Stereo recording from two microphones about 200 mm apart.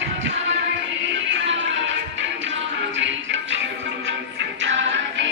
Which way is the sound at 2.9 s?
65° right (ahead or behind).